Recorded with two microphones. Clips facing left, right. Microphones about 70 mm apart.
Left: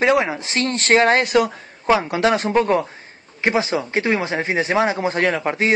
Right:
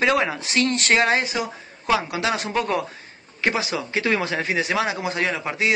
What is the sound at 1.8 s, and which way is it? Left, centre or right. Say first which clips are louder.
A man's voice: left 5 dB; left.